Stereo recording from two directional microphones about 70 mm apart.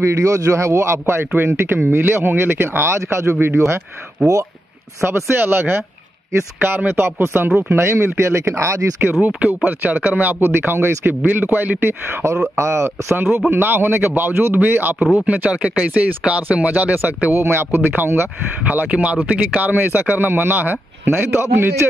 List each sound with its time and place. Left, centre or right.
0.0 s a man's voice: right
5.0 s a man's voice: right
7.8 s a man's voice: right
9.2 s a man's voice: right
18.7 s speech: centre